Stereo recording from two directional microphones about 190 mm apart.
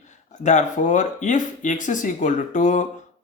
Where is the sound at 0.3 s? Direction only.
40° left (ahead or behind).